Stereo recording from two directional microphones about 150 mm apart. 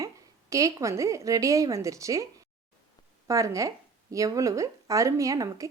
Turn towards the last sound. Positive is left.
turn(degrees=-20)  # may be behind; listen again after turning